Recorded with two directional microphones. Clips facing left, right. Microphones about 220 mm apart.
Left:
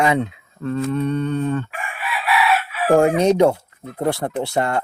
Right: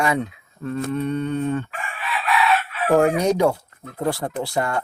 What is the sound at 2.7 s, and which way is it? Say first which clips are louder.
Chicken: left 2 dB; 5° left (ahead or behind).